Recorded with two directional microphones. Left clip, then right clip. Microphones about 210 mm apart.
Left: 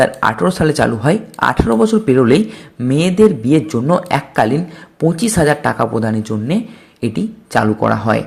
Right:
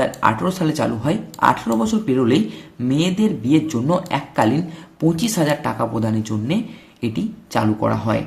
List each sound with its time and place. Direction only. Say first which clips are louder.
0.0 s speech: left 5 dB; 30° left (ahead or behind)